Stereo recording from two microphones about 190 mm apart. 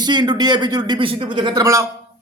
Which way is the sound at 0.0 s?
20° right (ahead or behind).